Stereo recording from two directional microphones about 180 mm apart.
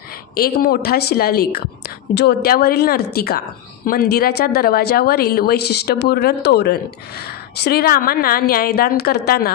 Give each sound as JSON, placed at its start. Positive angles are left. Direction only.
{"t": 0.4, "sound": "a woman's voice", "side_deg": 55}